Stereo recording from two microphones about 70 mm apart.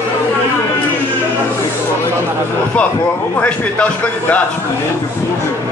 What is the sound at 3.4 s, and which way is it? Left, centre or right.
A man's voice, centre.